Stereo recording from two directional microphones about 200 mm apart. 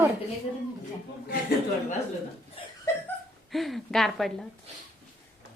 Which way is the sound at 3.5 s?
Centre (ahead or behind).